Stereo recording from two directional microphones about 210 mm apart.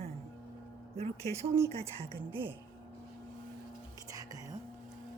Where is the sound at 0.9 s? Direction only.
30° right (ahead or behind).